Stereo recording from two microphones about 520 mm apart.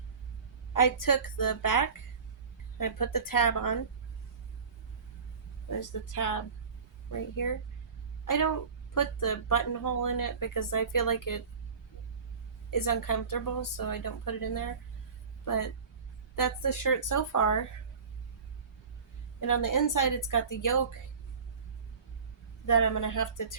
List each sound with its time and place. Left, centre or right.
0.7 s speech: left
5.8 s a woman's voice: left
12.7 s speech: left
19.4 s speech: left
22.6 s speech: left